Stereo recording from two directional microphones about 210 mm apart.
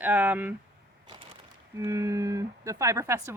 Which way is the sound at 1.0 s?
20° right (ahead or behind).